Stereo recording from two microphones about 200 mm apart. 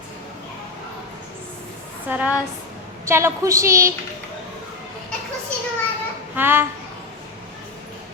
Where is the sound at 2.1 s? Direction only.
10° right (ahead or behind).